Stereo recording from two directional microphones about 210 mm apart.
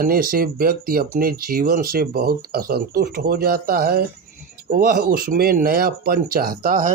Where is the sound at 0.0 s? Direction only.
45° right (ahead or behind).